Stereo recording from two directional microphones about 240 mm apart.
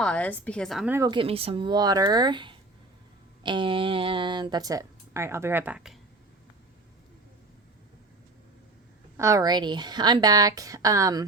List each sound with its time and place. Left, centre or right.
0.0 s speech: centre
9.1 s speech: centre